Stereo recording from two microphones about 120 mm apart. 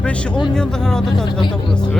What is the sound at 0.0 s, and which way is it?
Speech, 10° left (ahead or behind).